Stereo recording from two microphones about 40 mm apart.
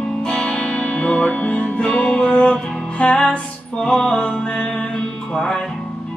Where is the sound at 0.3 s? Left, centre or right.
Left.